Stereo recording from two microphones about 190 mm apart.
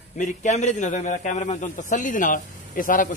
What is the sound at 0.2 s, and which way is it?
A man's voice, 40° left (ahead or behind).